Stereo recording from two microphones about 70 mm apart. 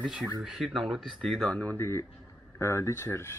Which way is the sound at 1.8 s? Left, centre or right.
Left.